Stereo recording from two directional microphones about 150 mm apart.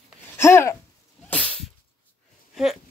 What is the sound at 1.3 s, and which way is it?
Sneeze, 10° left (ahead or behind).